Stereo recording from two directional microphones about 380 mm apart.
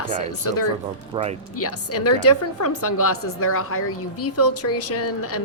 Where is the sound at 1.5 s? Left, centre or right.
Left.